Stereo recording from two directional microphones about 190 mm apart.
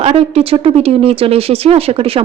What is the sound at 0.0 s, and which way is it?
Speech, 30° right (ahead or behind).